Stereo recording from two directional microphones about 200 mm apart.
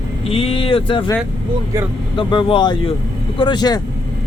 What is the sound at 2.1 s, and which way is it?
A man's voice, 25° left (ahead or behind).